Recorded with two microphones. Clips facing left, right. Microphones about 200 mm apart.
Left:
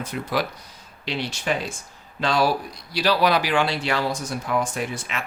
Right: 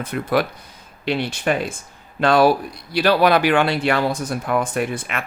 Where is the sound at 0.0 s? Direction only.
55° right (ahead or behind).